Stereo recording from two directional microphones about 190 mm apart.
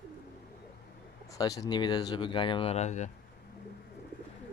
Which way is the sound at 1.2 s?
20° left (ahead or behind).